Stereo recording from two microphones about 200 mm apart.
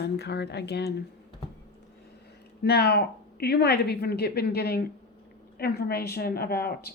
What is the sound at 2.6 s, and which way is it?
A woman's voice, 55° left (ahead or behind).